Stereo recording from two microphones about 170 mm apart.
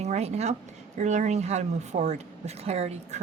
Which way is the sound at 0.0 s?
40° right (ahead or behind).